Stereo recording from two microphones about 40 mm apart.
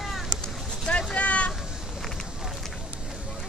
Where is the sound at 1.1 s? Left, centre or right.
Left.